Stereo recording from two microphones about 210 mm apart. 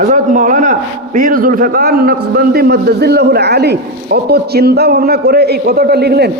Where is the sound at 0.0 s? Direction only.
35° right (ahead or behind).